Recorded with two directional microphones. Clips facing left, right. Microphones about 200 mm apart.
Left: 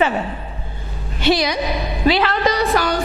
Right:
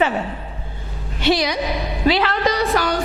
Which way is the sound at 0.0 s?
15° left (ahead or behind).